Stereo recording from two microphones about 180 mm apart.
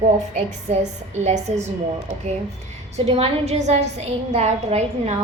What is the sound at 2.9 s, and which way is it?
A woman's voice, 35° right (ahead or behind).